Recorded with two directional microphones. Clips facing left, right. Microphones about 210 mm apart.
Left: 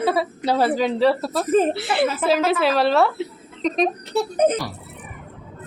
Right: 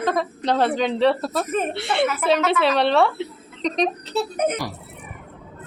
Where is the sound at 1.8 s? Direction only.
Centre (ahead or behind).